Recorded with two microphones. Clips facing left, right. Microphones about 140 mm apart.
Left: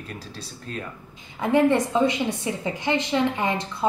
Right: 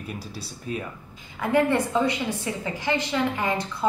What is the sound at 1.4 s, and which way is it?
A woman's voice, 20° left (ahead or behind).